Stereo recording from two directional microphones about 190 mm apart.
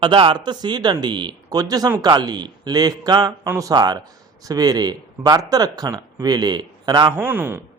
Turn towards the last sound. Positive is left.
turn(degrees=-10)  # may be behind; listen again after turning